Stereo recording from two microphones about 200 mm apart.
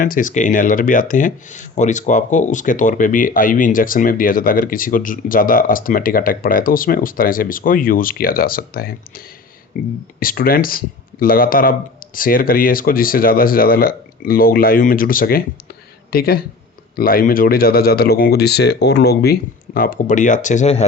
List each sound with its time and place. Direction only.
0.0 s speech: 40° left (ahead or behind)